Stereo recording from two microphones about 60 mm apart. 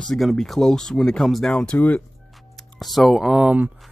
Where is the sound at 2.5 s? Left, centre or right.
Centre.